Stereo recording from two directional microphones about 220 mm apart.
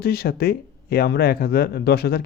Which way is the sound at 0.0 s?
45° left (ahead or behind).